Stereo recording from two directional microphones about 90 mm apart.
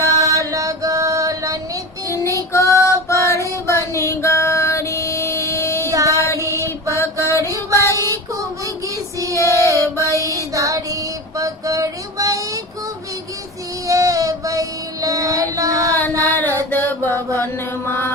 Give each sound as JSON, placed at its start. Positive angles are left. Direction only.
{"t": 0.0, "sound": "mantra", "side_deg": -35}
{"t": 2.0, "sound": "child singing", "side_deg": 35}
{"t": 2.5, "sound": "female singing", "side_deg": 35}
{"t": 5.9, "sound": "music", "side_deg": -40}
{"t": 6.1, "sound": "mantra", "side_deg": 30}
{"t": 7.7, "sound": "child singing", "side_deg": 35}
{"t": 7.9, "sound": "child singing", "side_deg": -35}
{"t": 9.3, "sound": "female singing", "side_deg": 35}
{"t": 9.8, "sound": "mantra", "side_deg": 35}
{"t": 10.2, "sound": "a sound", "side_deg": -40}
{"t": 13.8, "sound": "child singing", "side_deg": -40}
{"t": 16.0, "sound": "a sound", "side_deg": 20}
{"t": 16.7, "sound": "mantra", "side_deg": 25}